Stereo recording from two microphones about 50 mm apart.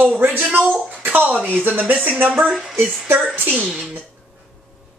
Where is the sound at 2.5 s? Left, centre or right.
Centre.